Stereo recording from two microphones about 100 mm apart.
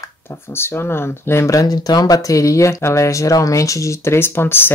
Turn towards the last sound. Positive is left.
turn(degrees=20)  # may be behind; listen again after turning